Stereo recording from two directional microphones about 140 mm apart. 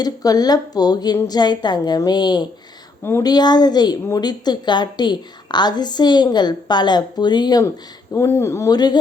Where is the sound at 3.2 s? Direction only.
30° left (ahead or behind).